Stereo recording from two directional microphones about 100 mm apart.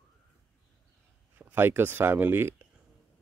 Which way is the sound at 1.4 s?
20° right (ahead or behind).